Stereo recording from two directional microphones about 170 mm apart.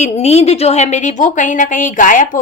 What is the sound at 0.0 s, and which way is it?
A woman's voice, 40° left (ahead or behind).